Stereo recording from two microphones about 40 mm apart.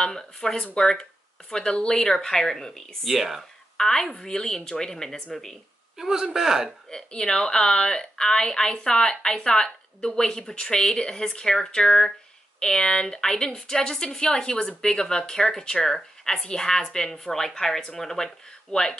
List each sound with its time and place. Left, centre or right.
0.0 s a woman's voice: centre
3.1 s a man's voice: centre
3.7 s a woman's voice: centre
5.9 s a man's voice: centre
7.1 s a woman's voice: centre